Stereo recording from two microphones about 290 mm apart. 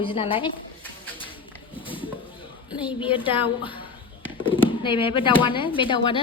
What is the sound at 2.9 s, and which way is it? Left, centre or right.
A woman's voice, centre.